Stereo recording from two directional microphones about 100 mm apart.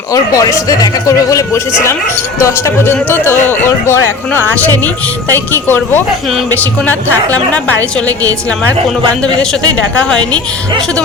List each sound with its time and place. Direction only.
0.1 s a man's voice: 35° left (ahead or behind); by 7.3 s 15° left (ahead or behind)
9.2 s a woman's voice: 5° left (ahead or behind)